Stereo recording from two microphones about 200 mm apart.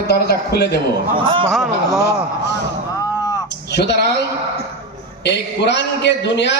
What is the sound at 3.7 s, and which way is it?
Speech, 55° left (ahead or behind).